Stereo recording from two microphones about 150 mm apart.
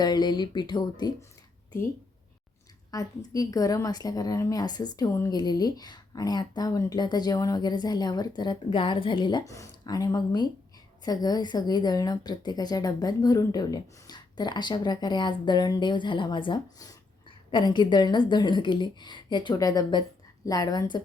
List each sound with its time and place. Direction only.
0.0 s a woman's voice: 25° left (ahead or behind)
2.9 s a woman's voice: 25° left (ahead or behind)